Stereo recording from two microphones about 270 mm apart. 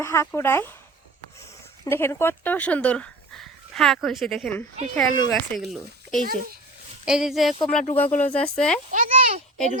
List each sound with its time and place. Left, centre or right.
0.0 s speech: centre
8.1 s speech: left
8.4 s speech: centre
8.9 s a child's voice: right